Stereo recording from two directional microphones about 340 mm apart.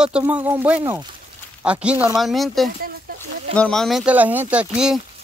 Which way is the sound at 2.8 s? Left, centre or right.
Right.